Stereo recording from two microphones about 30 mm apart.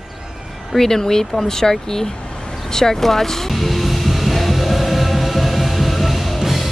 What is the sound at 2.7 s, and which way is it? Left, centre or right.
Music, centre.